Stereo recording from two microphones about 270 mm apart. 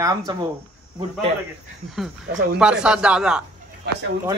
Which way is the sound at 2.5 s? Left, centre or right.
Centre.